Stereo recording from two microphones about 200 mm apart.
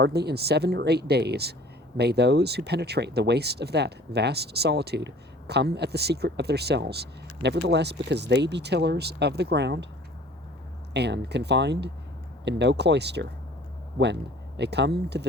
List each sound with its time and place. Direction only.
0.0 s speech: 55° right (ahead or behind)
10.9 s speech: 55° right (ahead or behind)